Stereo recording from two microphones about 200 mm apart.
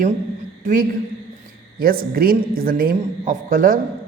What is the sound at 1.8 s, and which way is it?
A woman's voice, 45° right (ahead or behind).